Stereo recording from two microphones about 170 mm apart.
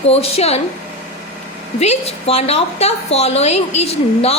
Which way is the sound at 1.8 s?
40° left (ahead or behind).